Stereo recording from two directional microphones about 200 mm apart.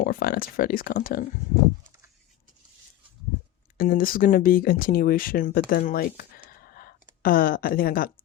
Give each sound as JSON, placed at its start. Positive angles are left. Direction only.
{"t": 0.0, "sound": "speech", "side_deg": 45}
{"t": 3.8, "sound": "speech", "side_deg": 45}
{"t": 6.7, "sound": "a sound", "side_deg": 50}